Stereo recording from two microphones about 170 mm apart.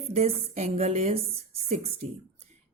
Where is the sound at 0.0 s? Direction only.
40° right (ahead or behind).